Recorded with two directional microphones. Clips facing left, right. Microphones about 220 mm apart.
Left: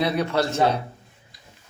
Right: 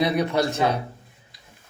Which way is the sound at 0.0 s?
15° right (ahead or behind).